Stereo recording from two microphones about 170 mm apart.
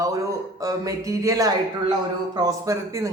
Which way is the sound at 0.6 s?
20° right (ahead or behind).